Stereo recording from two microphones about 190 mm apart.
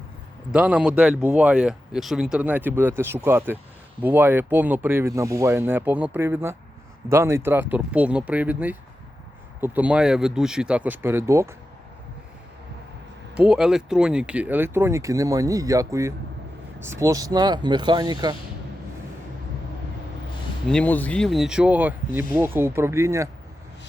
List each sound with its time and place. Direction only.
0.5 s speech: 5° right (ahead or behind)
13.5 s speech: 5° right (ahead or behind); by 18.3 s 20° right (ahead or behind)
20.7 s speech: 5° left (ahead or behind); by 23.3 s 15° right (ahead or behind)